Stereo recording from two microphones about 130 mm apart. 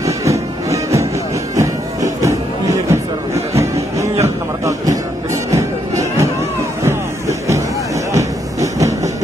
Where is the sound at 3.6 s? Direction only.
20° right (ahead or behind).